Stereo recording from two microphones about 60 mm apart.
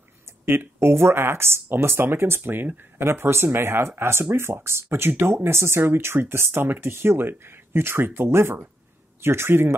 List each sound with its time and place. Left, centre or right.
0.5 s speech: right